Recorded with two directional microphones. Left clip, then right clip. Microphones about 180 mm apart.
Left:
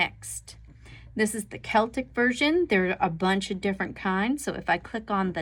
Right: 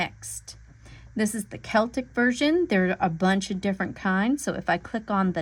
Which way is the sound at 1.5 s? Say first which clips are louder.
Right 1 dB; 70° right (ahead or behind).